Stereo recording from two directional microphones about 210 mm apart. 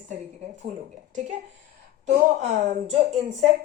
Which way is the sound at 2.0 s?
35° right (ahead or behind).